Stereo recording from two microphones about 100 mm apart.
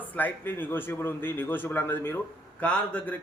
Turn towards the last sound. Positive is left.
turn(degrees=15)  # may be behind; listen again after turning